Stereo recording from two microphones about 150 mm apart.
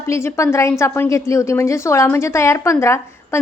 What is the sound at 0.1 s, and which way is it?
A woman's voice, 20° left (ahead or behind).